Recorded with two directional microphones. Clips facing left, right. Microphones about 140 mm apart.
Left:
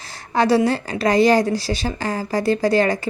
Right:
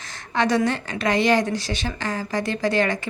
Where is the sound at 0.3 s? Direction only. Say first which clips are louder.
Left 4 dB; 35° left (ahead or behind).